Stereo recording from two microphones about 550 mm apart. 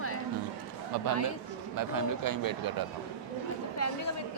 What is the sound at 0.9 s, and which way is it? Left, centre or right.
A man's voice, right.